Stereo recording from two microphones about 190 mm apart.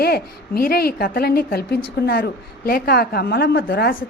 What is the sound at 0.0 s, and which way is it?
A woman's voice, 55° left (ahead or behind).